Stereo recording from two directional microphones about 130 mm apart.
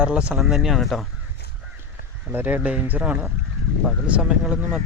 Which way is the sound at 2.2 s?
15° right (ahead or behind).